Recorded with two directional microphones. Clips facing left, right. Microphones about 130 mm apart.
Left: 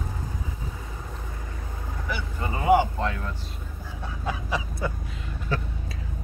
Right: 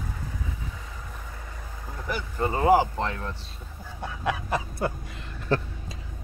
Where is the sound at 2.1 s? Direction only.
40° right (ahead or behind).